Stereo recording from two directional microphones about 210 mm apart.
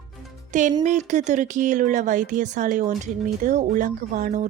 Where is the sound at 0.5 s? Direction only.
35° right (ahead or behind).